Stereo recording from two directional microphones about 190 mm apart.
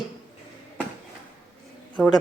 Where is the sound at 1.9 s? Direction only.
5° left (ahead or behind).